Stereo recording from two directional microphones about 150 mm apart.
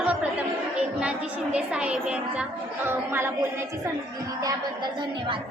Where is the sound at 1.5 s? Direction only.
5° right (ahead or behind).